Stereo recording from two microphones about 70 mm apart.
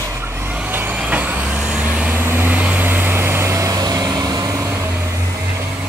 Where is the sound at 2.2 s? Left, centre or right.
Right.